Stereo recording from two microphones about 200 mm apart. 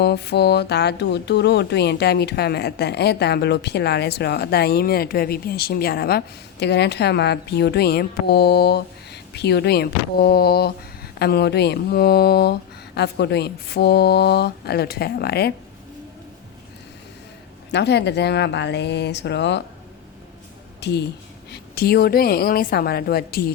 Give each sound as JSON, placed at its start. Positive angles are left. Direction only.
{"t": 0.0, "sound": "speech", "side_deg": 55}
{"t": 17.7, "sound": "speech", "side_deg": 60}
{"t": 20.8, "sound": "a woman's voice", "side_deg": 55}